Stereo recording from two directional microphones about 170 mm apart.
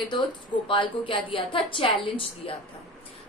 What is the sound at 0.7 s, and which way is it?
A woman's voice, 30° left (ahead or behind).